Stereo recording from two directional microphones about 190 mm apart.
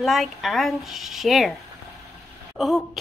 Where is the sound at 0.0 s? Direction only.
Centre (ahead or behind).